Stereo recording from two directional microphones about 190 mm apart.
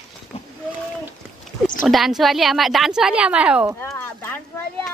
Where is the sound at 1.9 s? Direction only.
Centre (ahead or behind).